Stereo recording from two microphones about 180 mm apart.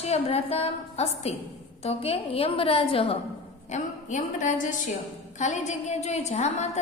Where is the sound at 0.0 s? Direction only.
35° left (ahead or behind).